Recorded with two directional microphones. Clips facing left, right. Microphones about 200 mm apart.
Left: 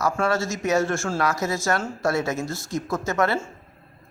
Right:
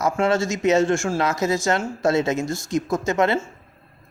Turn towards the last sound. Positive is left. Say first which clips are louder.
# right 3 dB
turn(degrees=-20)  # may be behind; listen again after turning